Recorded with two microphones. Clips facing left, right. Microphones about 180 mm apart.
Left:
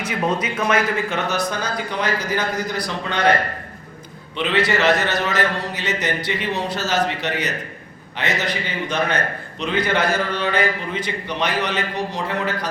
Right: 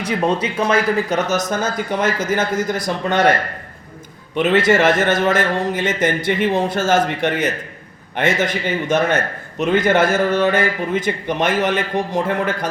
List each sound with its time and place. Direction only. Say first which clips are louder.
0.0 s a man's voice: right 3 dB; 30° right (ahead or behind); by 3.2 s 45° right (ahead or behind)
4.4 s a man's voice: right 6 dB; 45° right (ahead or behind)